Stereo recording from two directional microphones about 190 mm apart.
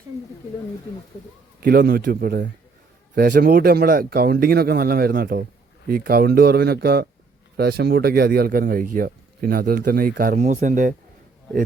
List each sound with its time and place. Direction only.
1.6 s speech: 50° right (ahead or behind)